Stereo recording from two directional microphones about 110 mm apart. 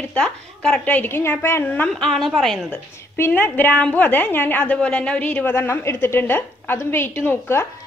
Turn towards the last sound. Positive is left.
turn(degrees=20)  # may be behind; listen again after turning